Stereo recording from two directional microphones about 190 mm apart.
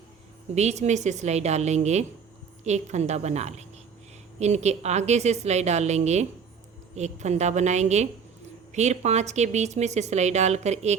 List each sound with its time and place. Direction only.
0.5 s a woman's voice: 35° right (ahead or behind)